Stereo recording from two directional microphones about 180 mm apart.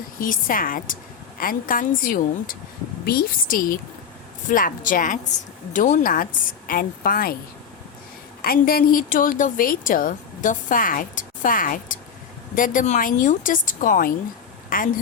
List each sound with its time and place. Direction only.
0.2 s a woman's voice: 50° left (ahead or behind)
8.4 s a woman's voice: 55° left (ahead or behind)